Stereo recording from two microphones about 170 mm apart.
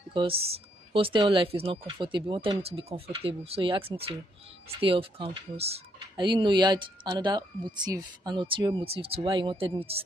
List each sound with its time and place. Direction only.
0.1 s speech: 30° right (ahead or behind)